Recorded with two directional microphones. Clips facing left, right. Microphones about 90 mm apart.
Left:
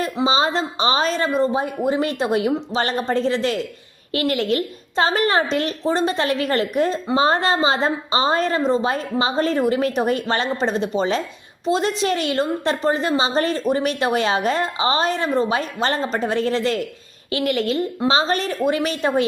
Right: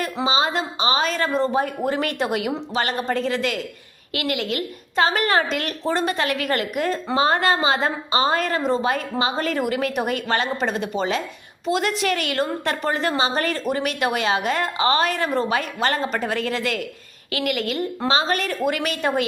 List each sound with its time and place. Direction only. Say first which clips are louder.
0.3 s a woman's voice: left 2 dB; 30° left (ahead or behind)
1.4 s a woman's voice: left 1 dB; 20° left (ahead or behind)